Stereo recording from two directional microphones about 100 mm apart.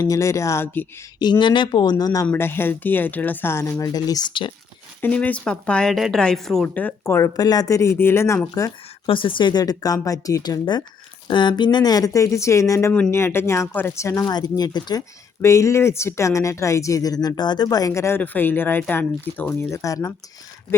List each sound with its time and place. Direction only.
0.0 s speech: 35° left (ahead or behind)
1.2 s speech: 50° left (ahead or behind)
2.2 s speech: 20° left (ahead or behind); by 4.4 s 40° left (ahead or behind)
4.9 s speech: 15° left (ahead or behind)
6.7 s speech: 20° left (ahead or behind)
7.3 s speech: 40° left (ahead or behind)
9.0 s speech: 60° left (ahead or behind)
15.4 s speech: 30° left (ahead or behind)
19.5 s speech: 30° left (ahead or behind)